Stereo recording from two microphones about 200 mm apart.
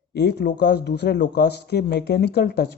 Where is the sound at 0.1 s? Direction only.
55° left (ahead or behind).